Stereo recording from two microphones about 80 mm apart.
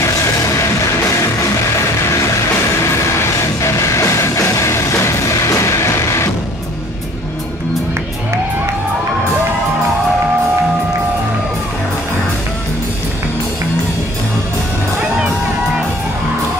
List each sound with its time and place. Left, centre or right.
0.0 s music: left
2.8 s music: left